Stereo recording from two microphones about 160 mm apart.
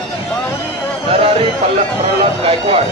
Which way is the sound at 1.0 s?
35° right (ahead or behind).